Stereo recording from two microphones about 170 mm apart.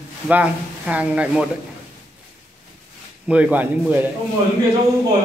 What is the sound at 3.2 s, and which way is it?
Speech, 10° right (ahead or behind).